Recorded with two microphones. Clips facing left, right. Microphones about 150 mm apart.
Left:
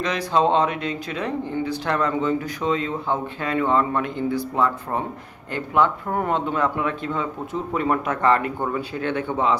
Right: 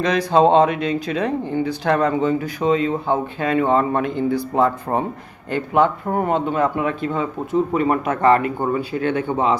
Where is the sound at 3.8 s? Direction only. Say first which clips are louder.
Right 3 dB; 25° right (ahead or behind).